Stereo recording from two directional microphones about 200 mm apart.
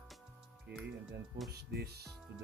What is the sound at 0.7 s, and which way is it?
Speech, 55° right (ahead or behind).